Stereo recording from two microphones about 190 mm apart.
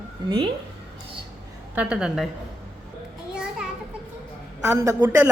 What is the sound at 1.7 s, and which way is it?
Speech, 5° right (ahead or behind).